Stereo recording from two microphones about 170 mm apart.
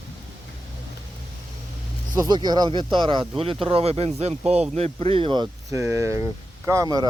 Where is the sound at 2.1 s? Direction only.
25° right (ahead or behind).